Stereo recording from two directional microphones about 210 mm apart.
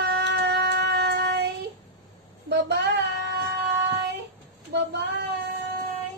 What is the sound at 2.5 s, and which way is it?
Child singing, 55° right (ahead or behind).